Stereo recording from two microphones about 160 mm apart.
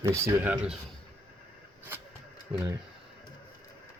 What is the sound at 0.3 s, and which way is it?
Speech, 10° right (ahead or behind).